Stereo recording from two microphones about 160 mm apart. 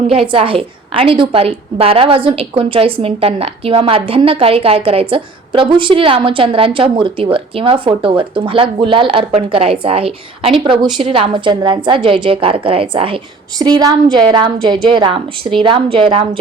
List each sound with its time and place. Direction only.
0.3 s a woman's voice: 35° right (ahead or behind)
13.6 s a woman's voice: 25° right (ahead or behind)